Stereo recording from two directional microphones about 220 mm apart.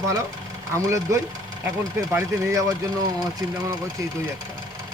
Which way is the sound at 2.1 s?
10° right (ahead or behind).